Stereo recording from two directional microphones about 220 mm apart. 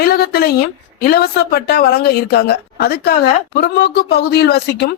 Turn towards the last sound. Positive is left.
turn(degrees=50)  # may be behind; listen again after turning